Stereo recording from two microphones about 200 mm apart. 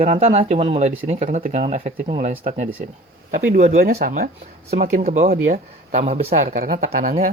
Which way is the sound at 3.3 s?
40° right (ahead or behind).